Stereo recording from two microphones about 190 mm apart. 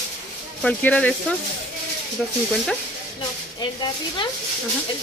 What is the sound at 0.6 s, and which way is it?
Speech, 5° left (ahead or behind).